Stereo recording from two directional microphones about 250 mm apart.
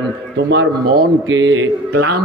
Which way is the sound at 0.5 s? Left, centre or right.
Right.